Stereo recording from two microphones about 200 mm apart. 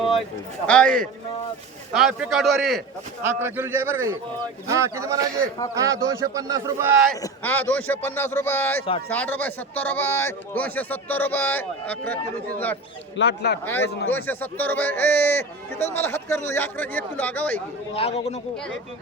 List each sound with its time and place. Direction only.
0.0 s a sound: centre (ahead or behind)
0.7 s a man's voice: 5° left (ahead or behind)
3.2 s a man's voice: 10° right (ahead or behind)
7.2 s speech: 10° left (ahead or behind)
13.1 s a man's voice: 60° left (ahead or behind)
14.3 s speech: 10° left (ahead or behind)
17.9 s a man's voice: 30° left (ahead or behind)